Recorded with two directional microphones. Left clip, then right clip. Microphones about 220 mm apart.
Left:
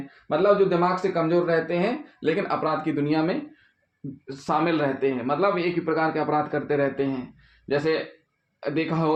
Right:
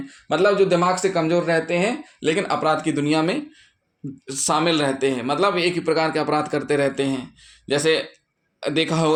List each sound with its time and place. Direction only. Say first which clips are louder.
0.3 s a man's voice: right 3 dB; 50° right (ahead or behind)
8.6 s speech: right 4 dB; 45° right (ahead or behind)